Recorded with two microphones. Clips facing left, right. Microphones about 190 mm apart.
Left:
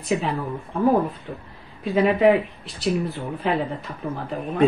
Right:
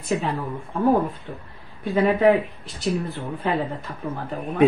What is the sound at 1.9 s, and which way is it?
Speech, centre (ahead or behind).